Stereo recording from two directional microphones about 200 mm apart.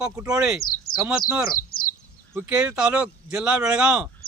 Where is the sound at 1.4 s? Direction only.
45° left (ahead or behind).